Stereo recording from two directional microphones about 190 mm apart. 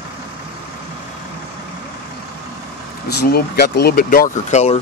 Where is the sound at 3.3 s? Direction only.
55° left (ahead or behind).